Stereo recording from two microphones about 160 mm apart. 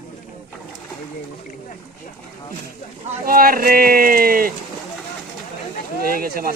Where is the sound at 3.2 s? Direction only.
65° right (ahead or behind).